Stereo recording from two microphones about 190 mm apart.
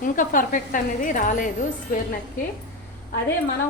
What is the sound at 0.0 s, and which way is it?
A woman's voice, 45° left (ahead or behind).